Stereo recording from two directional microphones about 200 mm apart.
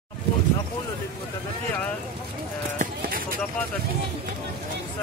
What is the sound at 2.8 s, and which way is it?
Clip-clop, 45° right (ahead or behind).